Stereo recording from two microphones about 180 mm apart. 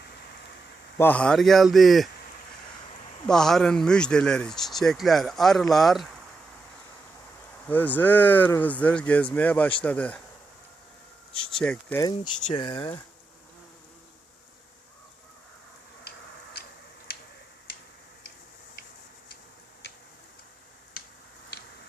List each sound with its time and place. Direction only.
0.9 s speech: 10° left (ahead or behind)
3.2 s speech: 5° left (ahead or behind)
7.7 s speech: 10° left (ahead or behind)
11.5 s speech: 5° left (ahead or behind)
12.5 s speech: 25° left (ahead or behind)